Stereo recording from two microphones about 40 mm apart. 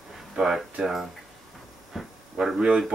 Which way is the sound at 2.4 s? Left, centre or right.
Centre.